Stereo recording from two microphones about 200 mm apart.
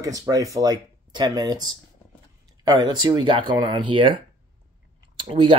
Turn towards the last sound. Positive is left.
turn(degrees=-25)  # may be behind; listen again after turning